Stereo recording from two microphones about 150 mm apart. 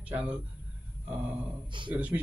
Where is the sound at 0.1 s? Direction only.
10° right (ahead or behind).